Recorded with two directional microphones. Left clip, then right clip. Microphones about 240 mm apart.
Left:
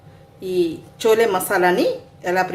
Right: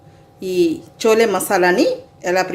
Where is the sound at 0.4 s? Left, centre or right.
Right.